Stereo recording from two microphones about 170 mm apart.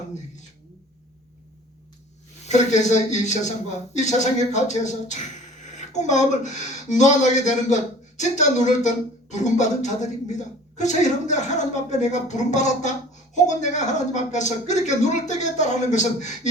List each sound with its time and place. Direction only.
2.4 s speech: 45° left (ahead or behind)